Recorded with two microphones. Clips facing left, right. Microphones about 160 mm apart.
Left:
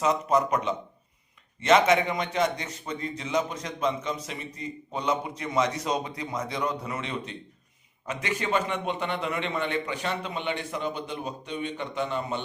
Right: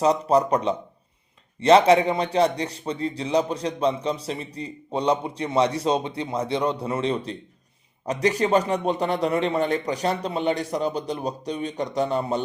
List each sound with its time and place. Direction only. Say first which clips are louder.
0.0 s a man's voice: right 5 dB; 35° right (ahead or behind)